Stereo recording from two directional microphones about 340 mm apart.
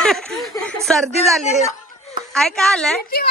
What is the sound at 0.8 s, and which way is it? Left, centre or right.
Speech, centre.